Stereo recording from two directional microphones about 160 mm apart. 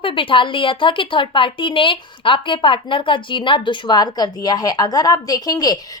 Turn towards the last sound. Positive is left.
turn(degrees=25)  # may be behind; listen again after turning